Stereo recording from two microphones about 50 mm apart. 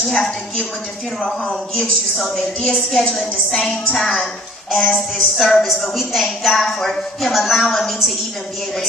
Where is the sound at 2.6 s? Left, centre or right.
Centre.